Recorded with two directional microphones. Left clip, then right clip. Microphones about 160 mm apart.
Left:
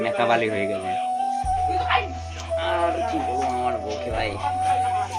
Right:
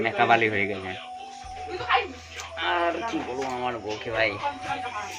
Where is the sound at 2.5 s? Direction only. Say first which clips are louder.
Left 3 dB; 15° right (ahead or behind).